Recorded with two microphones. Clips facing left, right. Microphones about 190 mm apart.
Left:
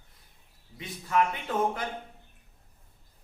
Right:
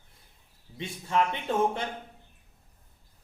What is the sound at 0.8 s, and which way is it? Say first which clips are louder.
A man's voice: even; 25° right (ahead or behind).